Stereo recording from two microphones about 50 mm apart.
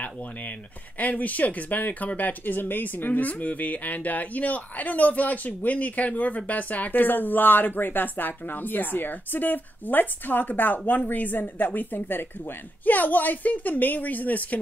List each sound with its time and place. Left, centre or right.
0.9 s speech: left